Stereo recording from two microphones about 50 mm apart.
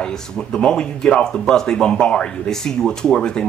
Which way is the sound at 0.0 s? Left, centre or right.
Centre.